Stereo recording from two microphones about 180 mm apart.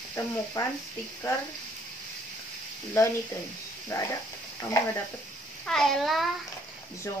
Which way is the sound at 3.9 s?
15° left (ahead or behind).